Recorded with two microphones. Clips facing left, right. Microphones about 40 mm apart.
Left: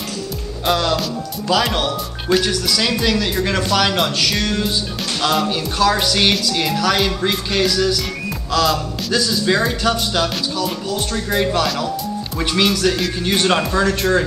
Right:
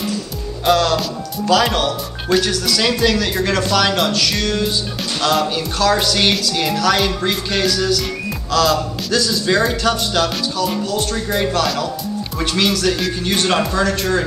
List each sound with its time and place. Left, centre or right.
0.7 s speech: centre